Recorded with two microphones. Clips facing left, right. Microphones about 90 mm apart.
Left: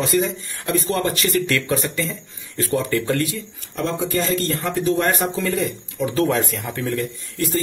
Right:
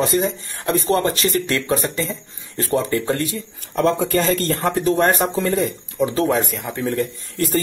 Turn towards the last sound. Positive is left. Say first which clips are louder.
# right 2 dB
turn(degrees=-45)  # may be behind; listen again after turning